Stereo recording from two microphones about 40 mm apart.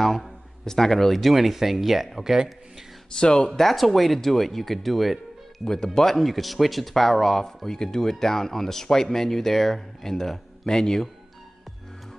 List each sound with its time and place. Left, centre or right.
0.0 s a man's voice: centre
3.2 s speech: centre
3.5 s speech: centre